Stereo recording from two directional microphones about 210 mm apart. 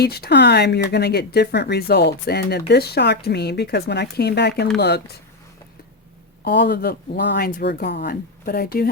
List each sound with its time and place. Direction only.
0.0 s speech: 50° left (ahead or behind)
6.4 s speech: 55° left (ahead or behind)